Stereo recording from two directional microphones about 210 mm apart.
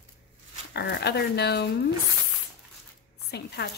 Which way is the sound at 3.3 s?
50° left (ahead or behind).